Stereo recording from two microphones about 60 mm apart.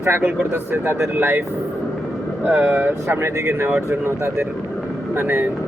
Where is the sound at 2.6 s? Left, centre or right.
Right.